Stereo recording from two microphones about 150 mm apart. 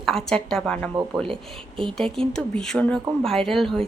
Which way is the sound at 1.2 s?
35° right (ahead or behind).